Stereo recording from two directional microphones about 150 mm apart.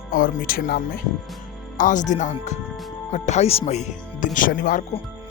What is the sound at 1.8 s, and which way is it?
Speech, 55° left (ahead or behind).